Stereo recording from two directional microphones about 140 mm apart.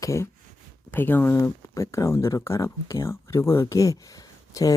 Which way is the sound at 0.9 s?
15° left (ahead or behind).